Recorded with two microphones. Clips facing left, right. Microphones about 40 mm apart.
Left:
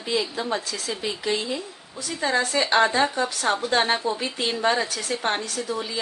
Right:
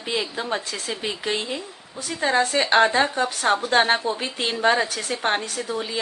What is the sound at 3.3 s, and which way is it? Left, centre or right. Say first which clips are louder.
Speech: right 3 dB; centre.